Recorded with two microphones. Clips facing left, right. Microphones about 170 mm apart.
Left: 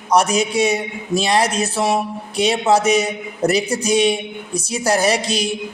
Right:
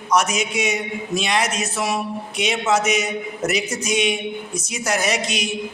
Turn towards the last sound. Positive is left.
turn(degrees=35)  # may be behind; listen again after turning